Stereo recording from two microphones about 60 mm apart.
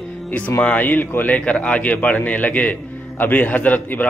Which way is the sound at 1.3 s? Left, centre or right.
Left.